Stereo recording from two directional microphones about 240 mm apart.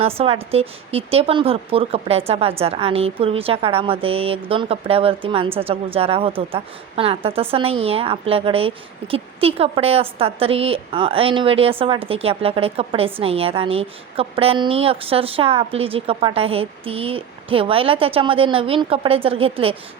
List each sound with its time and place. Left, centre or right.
0.0 s speech: right